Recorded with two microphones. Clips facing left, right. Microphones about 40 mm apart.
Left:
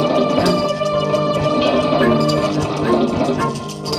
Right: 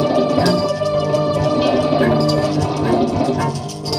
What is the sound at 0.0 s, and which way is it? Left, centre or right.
Music, left.